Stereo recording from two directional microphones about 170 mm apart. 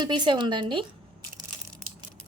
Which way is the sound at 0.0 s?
25° right (ahead or behind).